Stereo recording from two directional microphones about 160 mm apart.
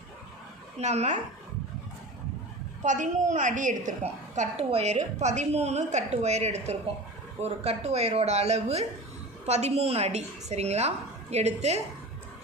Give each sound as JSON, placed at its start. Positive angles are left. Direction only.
{"t": 0.7, "sound": "a woman's voice", "side_deg": -45}
{"t": 2.8, "sound": "a woman's voice", "side_deg": -50}